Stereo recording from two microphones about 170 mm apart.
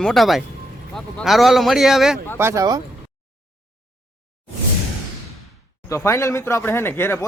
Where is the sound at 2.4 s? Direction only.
15° right (ahead or behind).